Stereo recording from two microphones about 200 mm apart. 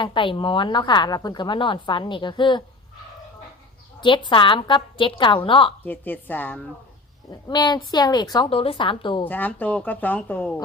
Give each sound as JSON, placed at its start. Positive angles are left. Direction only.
{"t": 0.0, "sound": "a woman's voice", "side_deg": 25}
{"t": 4.0, "sound": "a woman's voice", "side_deg": 25}
{"t": 5.8, "sound": "speech", "side_deg": 10}
{"t": 7.3, "sound": "a woman's voice", "side_deg": 20}
{"t": 9.2, "sound": "speech", "side_deg": 10}